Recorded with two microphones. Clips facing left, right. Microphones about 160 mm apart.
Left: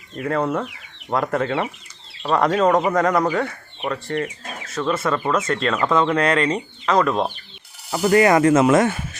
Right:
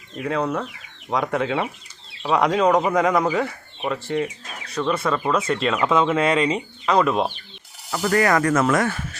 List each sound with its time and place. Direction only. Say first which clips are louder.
0.2 s speech: left 2 dB; centre (ahead or behind)
8.0 s speech: left 4 dB; 20° left (ahead or behind)